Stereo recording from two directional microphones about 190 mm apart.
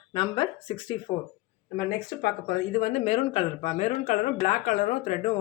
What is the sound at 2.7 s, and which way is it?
A woman's voice, 40° left (ahead or behind).